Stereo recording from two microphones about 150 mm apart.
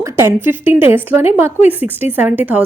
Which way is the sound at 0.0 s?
20° right (ahead or behind).